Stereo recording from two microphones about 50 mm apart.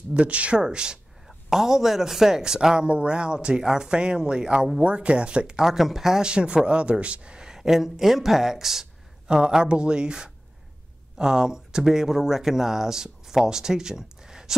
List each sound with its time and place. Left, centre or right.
0.1 s a man's voice: right
1.2 s a man's voice: centre
5.6 s a man's voice: centre